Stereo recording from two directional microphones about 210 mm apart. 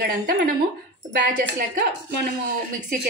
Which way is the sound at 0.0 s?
45° right (ahead or behind).